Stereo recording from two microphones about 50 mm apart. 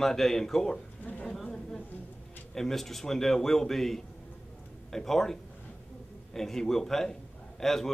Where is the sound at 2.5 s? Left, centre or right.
Centre.